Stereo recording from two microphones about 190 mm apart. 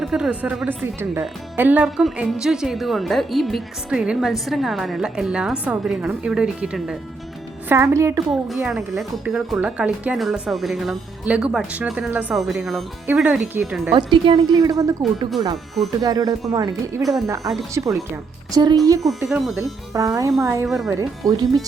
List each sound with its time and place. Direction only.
0.0 s speech: 5° right (ahead or behind)
8.3 s speech: centre (ahead or behind)
13.9 s a woman's voice: 25° right (ahead or behind)
16.0 s a woman's voice: 20° right (ahead or behind)
19.0 s speech: centre (ahead or behind)
19.9 s speech: 15° right (ahead or behind)
20.7 s speech: centre (ahead or behind)
20.9 s a woman's voice: 20° right (ahead or behind)